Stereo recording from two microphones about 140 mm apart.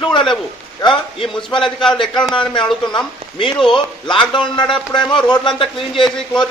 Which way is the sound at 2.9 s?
35° left (ahead or behind).